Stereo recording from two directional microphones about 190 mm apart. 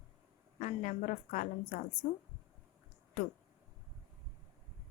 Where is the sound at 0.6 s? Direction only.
40° left (ahead or behind).